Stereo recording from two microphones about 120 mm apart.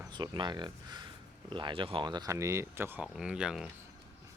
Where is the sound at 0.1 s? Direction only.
40° right (ahead or behind); by 3.1 s 20° right (ahead or behind).